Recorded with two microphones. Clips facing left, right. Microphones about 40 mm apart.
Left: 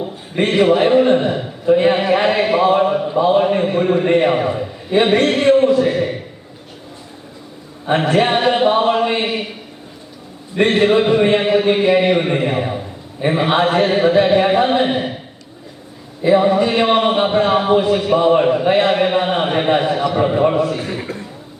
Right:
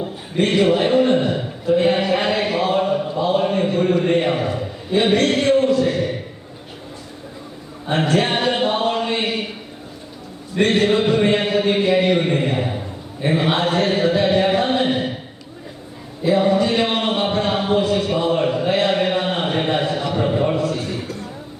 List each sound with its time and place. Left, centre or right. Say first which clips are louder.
0.3 s a man's voice: left 3 dB; left
7.9 s chant: left 4 dB; left
10.5 s a man's voice: left 3 dB; left
16.2 s a man's voice: left 3 dB; left